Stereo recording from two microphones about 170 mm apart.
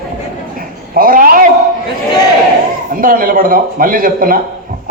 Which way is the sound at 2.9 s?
55° right (ahead or behind).